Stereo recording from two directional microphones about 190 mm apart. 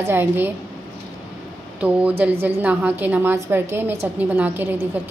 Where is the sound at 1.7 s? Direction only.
5° right (ahead or behind).